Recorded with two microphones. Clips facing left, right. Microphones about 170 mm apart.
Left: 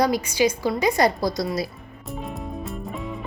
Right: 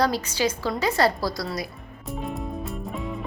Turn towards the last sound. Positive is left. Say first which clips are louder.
# even
turn(degrees=0)  # may be behind; listen again after turning